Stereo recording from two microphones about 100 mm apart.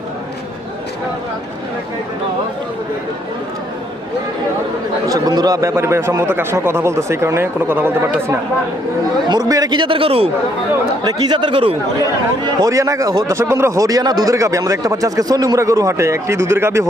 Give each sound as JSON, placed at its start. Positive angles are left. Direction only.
{"t": 5.0, "sound": "a man's voice", "side_deg": -40}
{"t": 9.3, "sound": "speech", "side_deg": -40}
{"t": 9.7, "sound": "a man's voice", "side_deg": -60}
{"t": 11.0, "sound": "speech", "side_deg": -45}
{"t": 12.6, "sound": "speech", "side_deg": -30}